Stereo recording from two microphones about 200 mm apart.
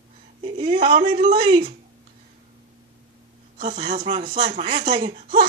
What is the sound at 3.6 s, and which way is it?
Speech, 30° right (ahead or behind).